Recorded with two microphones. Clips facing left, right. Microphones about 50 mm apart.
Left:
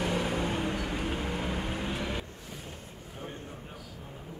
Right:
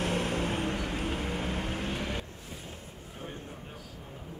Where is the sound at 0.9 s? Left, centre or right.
Centre.